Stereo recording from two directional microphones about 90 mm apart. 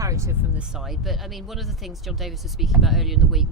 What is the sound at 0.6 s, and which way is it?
Speech, 5° right (ahead or behind).